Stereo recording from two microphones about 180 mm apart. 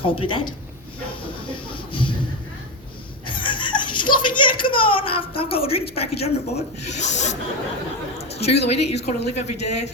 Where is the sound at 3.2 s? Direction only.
25° left (ahead or behind).